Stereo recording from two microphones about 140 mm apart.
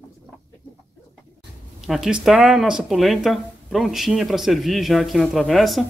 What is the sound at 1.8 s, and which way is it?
Speech, centre (ahead or behind).